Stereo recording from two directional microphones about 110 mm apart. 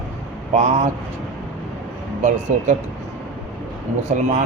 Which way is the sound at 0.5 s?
90° right.